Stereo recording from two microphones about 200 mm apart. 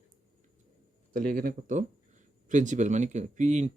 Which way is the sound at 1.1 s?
45° right (ahead or behind).